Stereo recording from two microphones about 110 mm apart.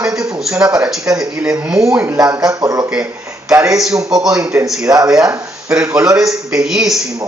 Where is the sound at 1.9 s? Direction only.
20° right (ahead or behind).